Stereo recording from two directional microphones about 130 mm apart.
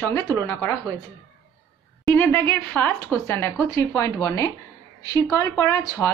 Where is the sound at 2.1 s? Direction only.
15° left (ahead or behind).